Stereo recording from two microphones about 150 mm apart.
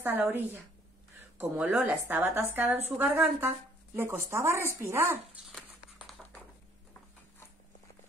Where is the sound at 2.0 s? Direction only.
15° right (ahead or behind).